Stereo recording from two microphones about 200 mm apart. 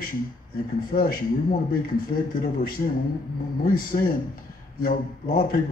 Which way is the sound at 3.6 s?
45° left (ahead or behind).